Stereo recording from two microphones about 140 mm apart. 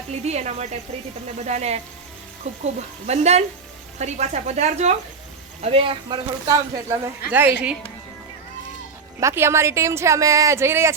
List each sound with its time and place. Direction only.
0.1 s speech: 50° right (ahead or behind)
5.6 s speech: 40° right (ahead or behind)
6.5 s a woman's voice: 25° right (ahead or behind)
7.3 s a woman's voice: 10° right (ahead or behind)
9.2 s a woman's voice: 20° right (ahead or behind)